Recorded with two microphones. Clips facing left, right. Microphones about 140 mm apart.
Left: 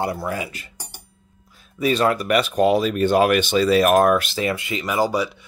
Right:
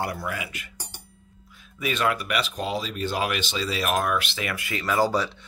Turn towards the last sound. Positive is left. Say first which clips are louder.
# left 2 dB
turn(degrees=15)  # may be behind; listen again after turning